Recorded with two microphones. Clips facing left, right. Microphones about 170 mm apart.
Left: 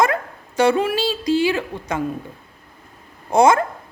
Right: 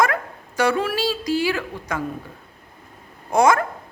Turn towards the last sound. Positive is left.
turn(degrees=25)  # may be behind; listen again after turning